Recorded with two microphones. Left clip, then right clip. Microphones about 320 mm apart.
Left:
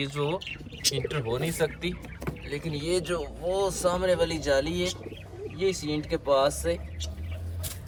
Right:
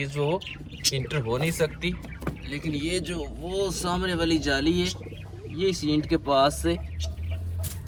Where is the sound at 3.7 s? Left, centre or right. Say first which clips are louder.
Left 3 dB; centre.